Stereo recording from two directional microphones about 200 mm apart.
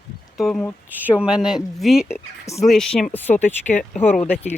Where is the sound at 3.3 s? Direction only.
35° left (ahead or behind).